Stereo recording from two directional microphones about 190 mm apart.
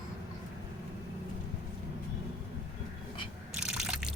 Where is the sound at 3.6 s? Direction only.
5° right (ahead or behind).